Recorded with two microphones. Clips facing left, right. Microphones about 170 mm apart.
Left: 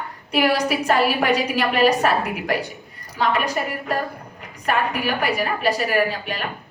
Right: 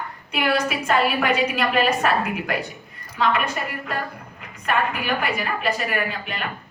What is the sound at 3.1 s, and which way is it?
Speech, 35° left (ahead or behind).